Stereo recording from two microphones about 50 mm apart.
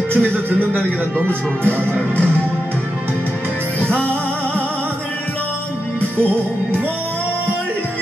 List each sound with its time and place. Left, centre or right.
0.1 s a man's voice: right
3.8 s music: left